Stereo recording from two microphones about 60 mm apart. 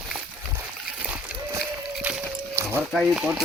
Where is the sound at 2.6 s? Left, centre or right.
Right.